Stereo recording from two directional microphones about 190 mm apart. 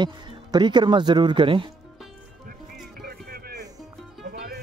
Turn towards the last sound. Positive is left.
turn(degrees=-55)  # may be behind; listen again after turning